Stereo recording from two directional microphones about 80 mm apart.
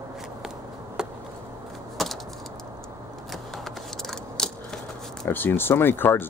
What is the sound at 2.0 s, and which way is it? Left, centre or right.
Keys jangling, centre.